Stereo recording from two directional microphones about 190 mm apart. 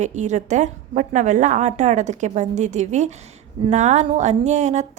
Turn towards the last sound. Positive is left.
turn(degrees=-40)  # may be behind; listen again after turning